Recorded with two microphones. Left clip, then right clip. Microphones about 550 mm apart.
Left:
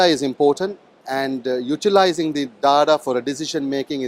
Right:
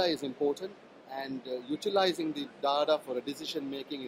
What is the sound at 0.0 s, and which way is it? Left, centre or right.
Speech, left.